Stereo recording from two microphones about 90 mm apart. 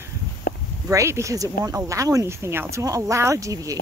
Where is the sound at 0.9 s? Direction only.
35° right (ahead or behind).